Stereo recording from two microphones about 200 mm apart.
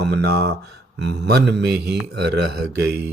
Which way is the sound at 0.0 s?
55° right (ahead or behind).